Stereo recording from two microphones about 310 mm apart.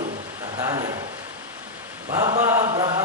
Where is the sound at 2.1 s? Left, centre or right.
Centre.